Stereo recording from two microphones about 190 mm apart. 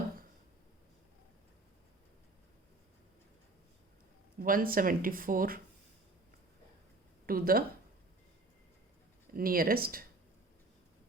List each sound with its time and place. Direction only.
4.4 s speech: 50° right (ahead or behind)
7.3 s speech: 50° right (ahead or behind)
9.3 s speech: 50° right (ahead or behind)